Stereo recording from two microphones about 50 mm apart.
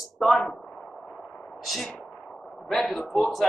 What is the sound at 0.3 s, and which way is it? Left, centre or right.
Speech, left.